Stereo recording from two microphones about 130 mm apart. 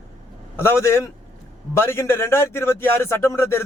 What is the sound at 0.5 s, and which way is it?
A man's voice, 20° left (ahead or behind).